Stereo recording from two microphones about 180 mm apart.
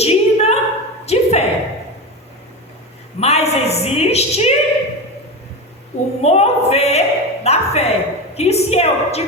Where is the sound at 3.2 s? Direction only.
35° left (ahead or behind).